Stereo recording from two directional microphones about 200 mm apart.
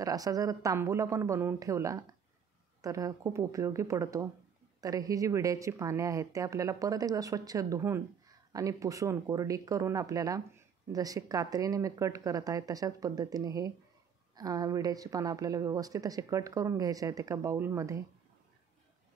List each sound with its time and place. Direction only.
0.0 s speech: 15° right (ahead or behind)